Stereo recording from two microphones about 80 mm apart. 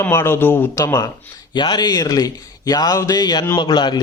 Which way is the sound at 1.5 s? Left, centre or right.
Left.